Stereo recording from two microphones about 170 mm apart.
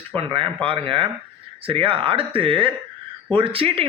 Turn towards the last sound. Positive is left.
turn(degrees=-35)  # may be behind; listen again after turning